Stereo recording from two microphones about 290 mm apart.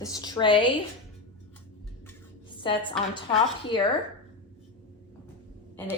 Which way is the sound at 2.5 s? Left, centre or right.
Centre.